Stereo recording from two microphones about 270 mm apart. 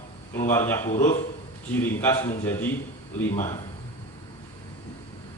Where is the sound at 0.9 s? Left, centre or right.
Left.